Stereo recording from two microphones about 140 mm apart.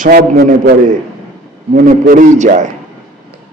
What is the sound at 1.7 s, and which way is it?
A man's voice, 70° right (ahead or behind).